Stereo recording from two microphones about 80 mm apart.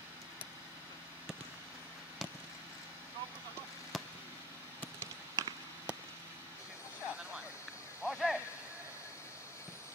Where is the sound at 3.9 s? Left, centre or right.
Centre.